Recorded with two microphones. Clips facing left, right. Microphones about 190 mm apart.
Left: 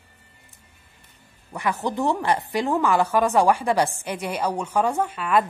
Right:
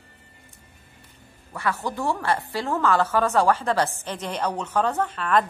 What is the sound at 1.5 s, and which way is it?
A woman's voice, 15° left (ahead or behind).